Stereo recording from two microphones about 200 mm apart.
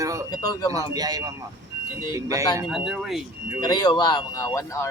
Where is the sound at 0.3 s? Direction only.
20° left (ahead or behind).